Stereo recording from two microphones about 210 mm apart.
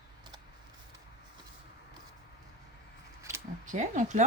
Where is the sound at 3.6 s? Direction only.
35° right (ahead or behind).